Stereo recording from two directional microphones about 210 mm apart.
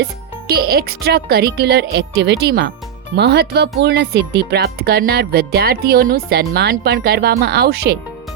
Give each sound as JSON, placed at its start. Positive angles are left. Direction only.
{"t": 0.0, "sound": "speech", "side_deg": -45}